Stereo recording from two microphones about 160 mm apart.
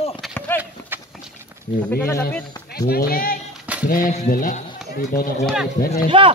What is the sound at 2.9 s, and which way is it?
A man's voice, 70° left (ahead or behind).